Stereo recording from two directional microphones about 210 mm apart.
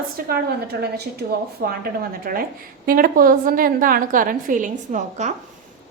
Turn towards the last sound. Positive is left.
turn(degrees=-35)  # may be behind; listen again after turning